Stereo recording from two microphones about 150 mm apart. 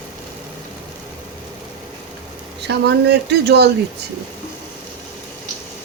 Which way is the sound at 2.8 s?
90° right.